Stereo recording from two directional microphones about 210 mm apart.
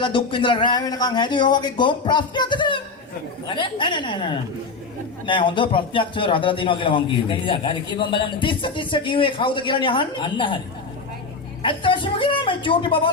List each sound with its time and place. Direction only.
0.0 s a man's voice: 25° left (ahead or behind)
11.6 s a man's voice: 25° left (ahead or behind)